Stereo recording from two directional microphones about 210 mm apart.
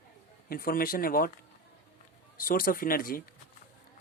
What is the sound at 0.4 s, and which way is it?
Speech, 45° left (ahead or behind).